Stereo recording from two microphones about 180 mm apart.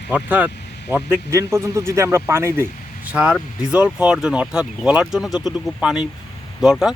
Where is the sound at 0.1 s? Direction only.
10° right (ahead or behind).